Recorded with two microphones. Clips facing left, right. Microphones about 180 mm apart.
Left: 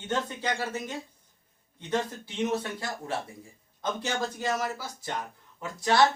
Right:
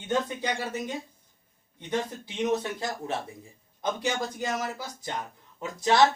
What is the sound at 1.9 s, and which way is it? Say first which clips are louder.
Speech: even; 15° right (ahead or behind).